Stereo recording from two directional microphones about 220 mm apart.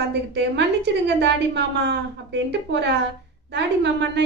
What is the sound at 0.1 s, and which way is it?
A woman's voice, 50° right (ahead or behind).